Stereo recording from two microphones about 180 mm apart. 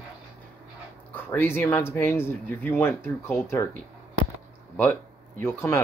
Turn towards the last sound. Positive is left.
turn(degrees=15)  # may be behind; listen again after turning